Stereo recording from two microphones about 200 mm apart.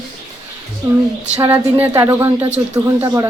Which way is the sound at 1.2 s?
30° right (ahead or behind).